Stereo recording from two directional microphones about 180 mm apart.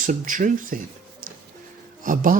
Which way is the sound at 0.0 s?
50° right (ahead or behind).